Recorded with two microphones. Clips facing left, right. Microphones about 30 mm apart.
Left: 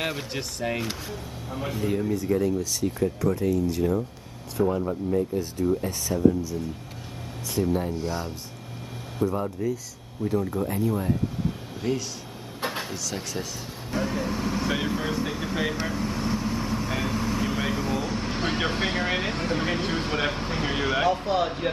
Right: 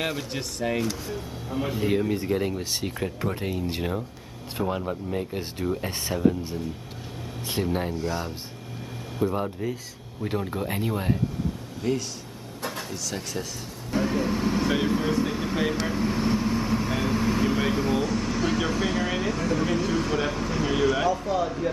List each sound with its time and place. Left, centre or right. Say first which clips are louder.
0.0 s speech: even; centre
1.8 s speech: right 2 dB; right
2.0 s speech: left 1 dB; right
9.2 s speech: even; right
10.5 s speech: left 2 dB; right
11.8 s speech: right 1 dB; centre
13.9 s vehicle: right 3 dB; centre
18.0 s vehicle: right 3 dB; centre
18.3 s speech: right 1 dB; left
21.0 s speech: left 1 dB; left